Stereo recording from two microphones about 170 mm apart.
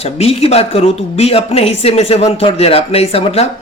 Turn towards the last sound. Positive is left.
turn(degrees=35)  # may be behind; listen again after turning